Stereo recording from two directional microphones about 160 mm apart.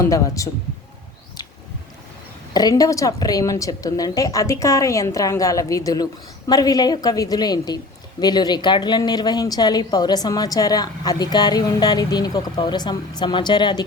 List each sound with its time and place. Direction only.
0.0 s a woman's voice: 20° left (ahead or behind)
2.5 s a woman's voice: 25° left (ahead or behind)